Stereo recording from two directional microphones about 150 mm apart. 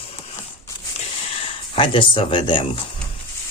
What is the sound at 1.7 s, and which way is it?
Speech, 35° left (ahead or behind).